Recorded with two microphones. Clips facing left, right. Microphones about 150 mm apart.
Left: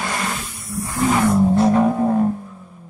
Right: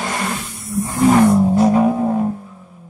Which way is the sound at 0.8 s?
20° right (ahead or behind).